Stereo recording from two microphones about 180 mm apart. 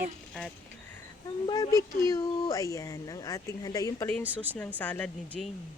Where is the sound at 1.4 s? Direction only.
20° left (ahead or behind).